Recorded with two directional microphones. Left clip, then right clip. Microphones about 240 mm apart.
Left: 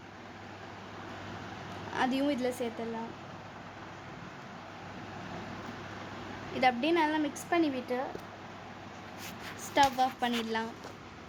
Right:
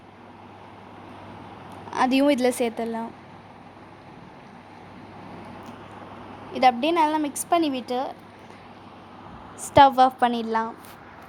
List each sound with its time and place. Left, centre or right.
1.9 s a woman's voice: right
6.5 s a woman's voice: right
9.7 s a woman's voice: right